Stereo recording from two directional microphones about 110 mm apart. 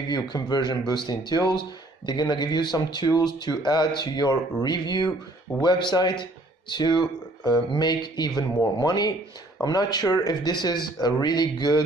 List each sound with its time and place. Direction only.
0.1 s speech: 40° left (ahead or behind)